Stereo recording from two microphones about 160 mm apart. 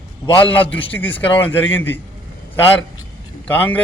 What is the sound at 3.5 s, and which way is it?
Speech, 10° left (ahead or behind).